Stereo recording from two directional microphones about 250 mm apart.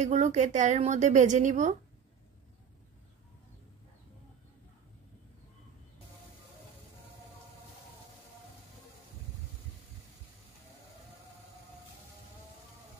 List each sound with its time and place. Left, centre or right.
0.0 s a woman's voice: right